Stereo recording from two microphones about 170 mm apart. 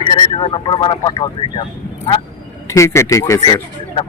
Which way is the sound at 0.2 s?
30° left (ahead or behind).